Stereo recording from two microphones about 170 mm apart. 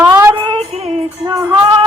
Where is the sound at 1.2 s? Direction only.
20° right (ahead or behind).